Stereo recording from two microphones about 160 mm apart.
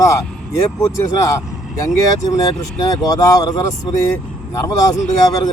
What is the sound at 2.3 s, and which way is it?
Speech, 20° left (ahead or behind).